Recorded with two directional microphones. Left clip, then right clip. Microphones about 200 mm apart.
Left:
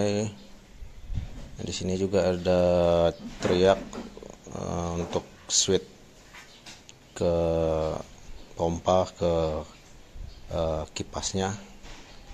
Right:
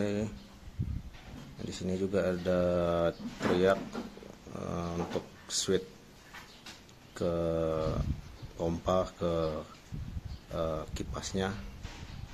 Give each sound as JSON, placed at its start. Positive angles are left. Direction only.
{"t": 0.0, "sound": "speech", "side_deg": 10}
{"t": 1.6, "sound": "speech", "side_deg": 10}
{"t": 7.2, "sound": "speech", "side_deg": 5}